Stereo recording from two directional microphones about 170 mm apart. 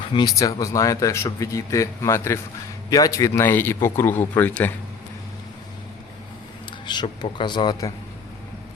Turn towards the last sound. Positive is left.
turn(degrees=25)  # may be behind; listen again after turning